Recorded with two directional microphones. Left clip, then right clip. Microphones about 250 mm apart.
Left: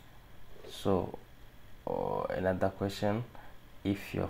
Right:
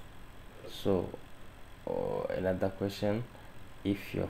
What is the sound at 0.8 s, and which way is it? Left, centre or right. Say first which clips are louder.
Speech: even; centre.